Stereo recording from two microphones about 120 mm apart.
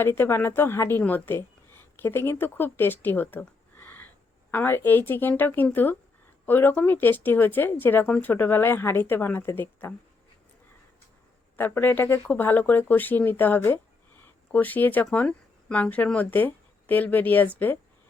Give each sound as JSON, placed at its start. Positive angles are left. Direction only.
{"t": 0.0, "sound": "a woman's voice", "side_deg": 20}
{"t": 11.5, "sound": "speech", "side_deg": 15}
{"t": 14.2, "sound": "a sound", "side_deg": 15}
{"t": 15.0, "sound": "speech", "side_deg": 10}